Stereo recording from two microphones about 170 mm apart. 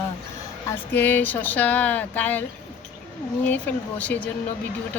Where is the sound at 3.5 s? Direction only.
10° left (ahead or behind).